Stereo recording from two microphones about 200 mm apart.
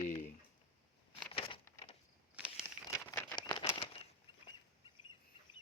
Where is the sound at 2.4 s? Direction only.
5° right (ahead or behind).